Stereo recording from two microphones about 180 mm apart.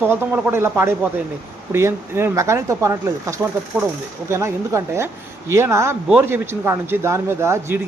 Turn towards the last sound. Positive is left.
turn(degrees=-15)  # may be behind; listen again after turning